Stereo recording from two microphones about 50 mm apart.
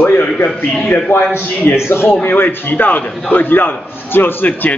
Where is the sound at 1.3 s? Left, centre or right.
Left.